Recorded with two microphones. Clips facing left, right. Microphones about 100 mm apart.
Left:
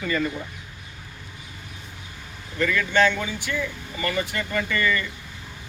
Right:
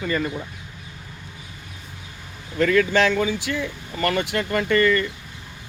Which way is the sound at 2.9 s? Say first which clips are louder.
Right 2 dB; 85° right.